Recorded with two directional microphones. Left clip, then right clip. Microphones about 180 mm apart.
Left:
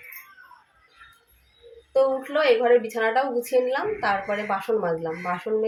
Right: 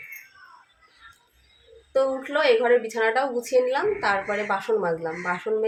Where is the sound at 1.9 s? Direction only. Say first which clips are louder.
Left 1 dB; 5° right (ahead or behind).